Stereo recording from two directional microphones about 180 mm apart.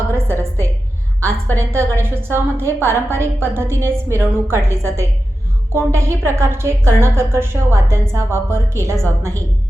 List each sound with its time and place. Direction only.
0.1 s a woman's voice: 15° right (ahead or behind)
1.2 s a woman's voice: 10° left (ahead or behind)
1.7 s a woman's voice: 15° right (ahead or behind)